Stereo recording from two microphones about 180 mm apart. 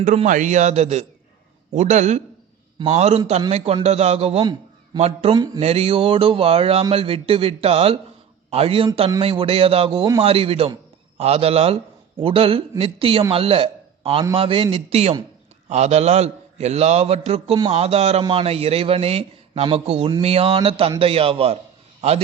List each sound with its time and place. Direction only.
0.0 s a man's voice: 45° right (ahead or behind)